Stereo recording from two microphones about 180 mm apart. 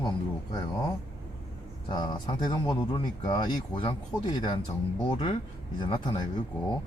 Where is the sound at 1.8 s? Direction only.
25° left (ahead or behind).